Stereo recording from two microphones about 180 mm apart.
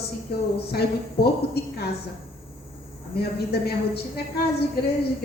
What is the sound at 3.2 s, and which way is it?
A woman's voice, 60° left (ahead or behind).